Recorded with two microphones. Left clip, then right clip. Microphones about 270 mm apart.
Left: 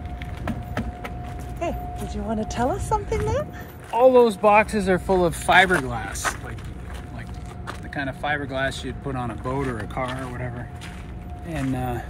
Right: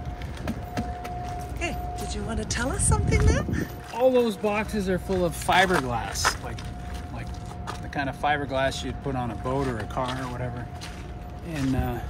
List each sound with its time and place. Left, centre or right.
0.5 s wood: centre
1.6 s speech: centre
3.9 s speech: centre
7.9 s speech: centre
11.5 s speech: centre